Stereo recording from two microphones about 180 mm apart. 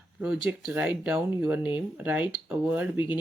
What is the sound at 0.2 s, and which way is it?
Speech, 10° right (ahead or behind).